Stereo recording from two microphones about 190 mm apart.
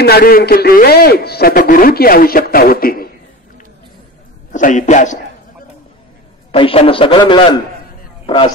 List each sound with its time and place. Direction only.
0.0 s a man's voice: 55° left (ahead or behind)
4.5 s a man's voice: 40° left (ahead or behind)
6.5 s a man's voice: 30° left (ahead or behind)